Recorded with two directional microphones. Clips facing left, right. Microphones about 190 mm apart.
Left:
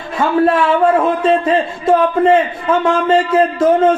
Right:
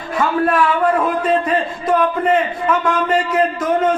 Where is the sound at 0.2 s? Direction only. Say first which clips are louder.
Left 3 dB; 25° left (ahead or behind).